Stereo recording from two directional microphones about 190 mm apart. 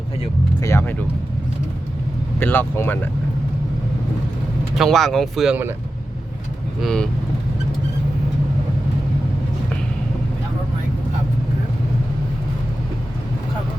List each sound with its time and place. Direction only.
0.6 s speech: 15° left (ahead or behind)
2.4 s speech: 10° left (ahead or behind)
4.7 s speech: centre (ahead or behind)
6.8 s speech: 5° left (ahead or behind)